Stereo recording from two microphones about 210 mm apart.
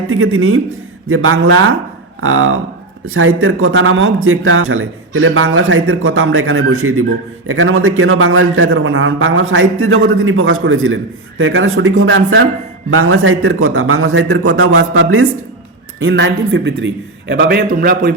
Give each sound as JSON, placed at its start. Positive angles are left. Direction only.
{"t": 0.1, "sound": "a man's voice", "side_deg": -75}
{"t": 7.4, "sound": "a man's voice", "side_deg": -70}
{"t": 16.0, "sound": "a man's voice", "side_deg": -60}